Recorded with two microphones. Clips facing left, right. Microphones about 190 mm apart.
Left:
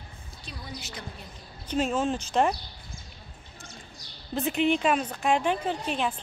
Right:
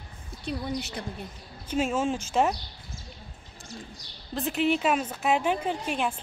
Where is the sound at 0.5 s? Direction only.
60° right (ahead or behind).